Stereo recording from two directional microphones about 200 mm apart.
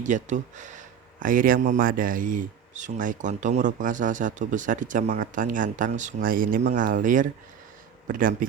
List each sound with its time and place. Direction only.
0.0 s speech: 40° right (ahead or behind)